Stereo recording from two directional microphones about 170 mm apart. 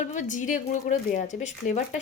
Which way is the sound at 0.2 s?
50° left (ahead or behind).